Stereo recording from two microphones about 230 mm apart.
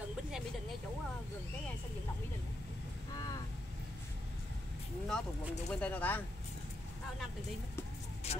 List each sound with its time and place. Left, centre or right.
5.0 s speech: centre
8.2 s vehicle: left